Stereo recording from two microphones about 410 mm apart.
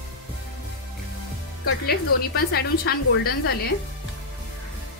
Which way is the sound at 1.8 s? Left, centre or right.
Left.